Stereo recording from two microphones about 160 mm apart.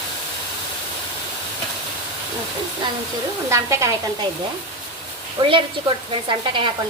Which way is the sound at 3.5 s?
20° right (ahead or behind).